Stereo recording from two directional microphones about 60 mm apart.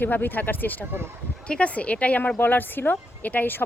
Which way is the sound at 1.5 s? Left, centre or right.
Left.